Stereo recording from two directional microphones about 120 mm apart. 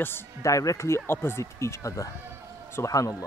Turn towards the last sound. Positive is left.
turn(degrees=30)  # may be behind; listen again after turning